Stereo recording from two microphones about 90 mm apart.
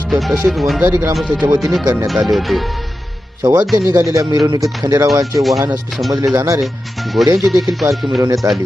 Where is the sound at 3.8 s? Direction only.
30° right (ahead or behind).